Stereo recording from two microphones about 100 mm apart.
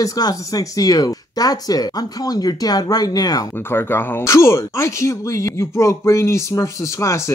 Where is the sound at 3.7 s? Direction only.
25° left (ahead or behind).